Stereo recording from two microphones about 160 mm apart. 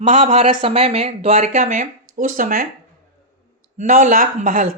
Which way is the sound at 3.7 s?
55° right (ahead or behind).